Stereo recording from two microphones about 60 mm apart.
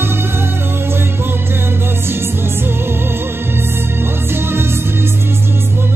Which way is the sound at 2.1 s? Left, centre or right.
Right.